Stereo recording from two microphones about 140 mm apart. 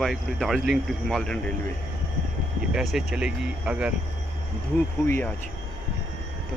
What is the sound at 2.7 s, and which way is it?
Speech, 5° right (ahead or behind).